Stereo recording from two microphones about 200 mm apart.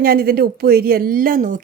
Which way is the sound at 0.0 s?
50° right (ahead or behind).